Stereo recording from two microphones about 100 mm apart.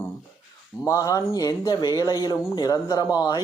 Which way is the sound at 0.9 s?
35° left (ahead or behind).